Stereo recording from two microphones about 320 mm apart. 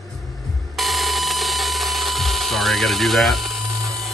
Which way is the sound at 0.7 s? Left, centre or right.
Centre.